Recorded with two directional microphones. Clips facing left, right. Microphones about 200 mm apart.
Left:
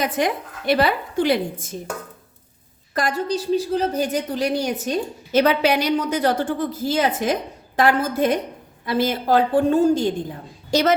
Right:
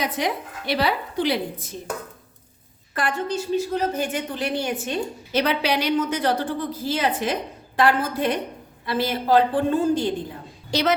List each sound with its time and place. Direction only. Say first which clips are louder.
0.0 s a woman's voice: left 3 dB; 50° left (ahead or behind)
2.9 s a woman's voice: left 3 dB; 40° left (ahead or behind)